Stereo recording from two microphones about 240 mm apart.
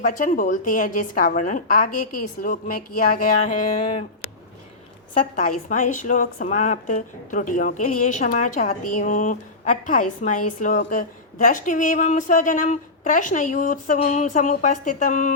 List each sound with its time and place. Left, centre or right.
0.0 s a woman's voice: left
3.4 s a sound: left
5.5 s a woman's voice: left